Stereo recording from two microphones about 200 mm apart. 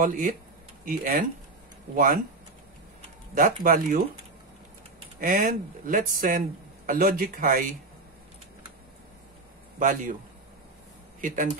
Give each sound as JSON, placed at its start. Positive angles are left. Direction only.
{"t": 0.0, "sound": "speech", "side_deg": -40}
{"t": 3.6, "sound": "speech", "side_deg": -45}
{"t": 5.2, "sound": "speech", "side_deg": -40}
{"t": 9.8, "sound": "speech", "side_deg": -40}
{"t": 11.1, "sound": "speech", "side_deg": -40}